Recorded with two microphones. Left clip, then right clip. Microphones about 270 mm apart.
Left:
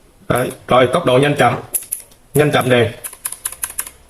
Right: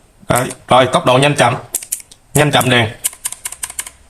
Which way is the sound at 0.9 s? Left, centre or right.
Centre.